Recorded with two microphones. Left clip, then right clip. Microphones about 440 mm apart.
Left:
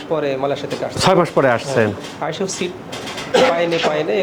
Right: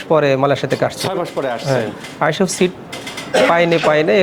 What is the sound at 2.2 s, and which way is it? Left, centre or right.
Speech, right.